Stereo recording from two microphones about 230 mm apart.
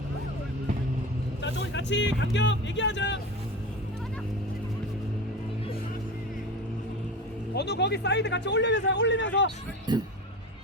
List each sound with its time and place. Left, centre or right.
1.4 s speech: left
7.5 s a man's voice: left
9.9 s speech: centre